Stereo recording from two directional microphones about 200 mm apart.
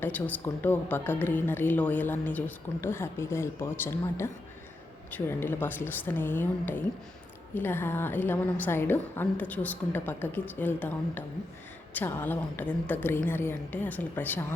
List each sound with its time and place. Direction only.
0.0 s a woman's voice: 10° left (ahead or behind)